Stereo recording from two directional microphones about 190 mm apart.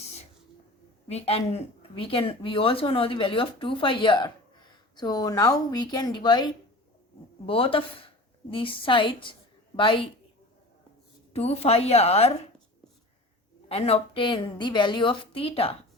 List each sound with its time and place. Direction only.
1.1 s speech: 30° left (ahead or behind)
11.3 s a woman's voice: 30° left (ahead or behind)
13.7 s speech: 30° left (ahead or behind)